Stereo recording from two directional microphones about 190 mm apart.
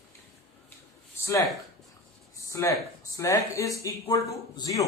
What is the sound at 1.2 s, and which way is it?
Speech, 15° left (ahead or behind).